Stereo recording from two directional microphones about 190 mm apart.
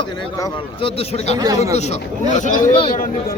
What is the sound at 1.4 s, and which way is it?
Speech, 20° right (ahead or behind).